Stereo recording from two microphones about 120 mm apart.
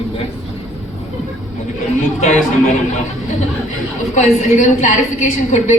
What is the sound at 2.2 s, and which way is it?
Speech, 80° left.